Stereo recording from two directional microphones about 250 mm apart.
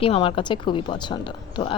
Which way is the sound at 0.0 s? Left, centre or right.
Left.